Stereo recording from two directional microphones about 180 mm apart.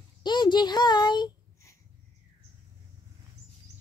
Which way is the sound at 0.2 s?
25° left (ahead or behind).